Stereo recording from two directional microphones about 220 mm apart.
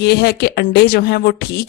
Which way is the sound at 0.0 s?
45° left (ahead or behind).